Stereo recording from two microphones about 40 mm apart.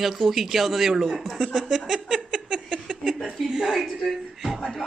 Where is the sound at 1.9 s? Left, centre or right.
Centre.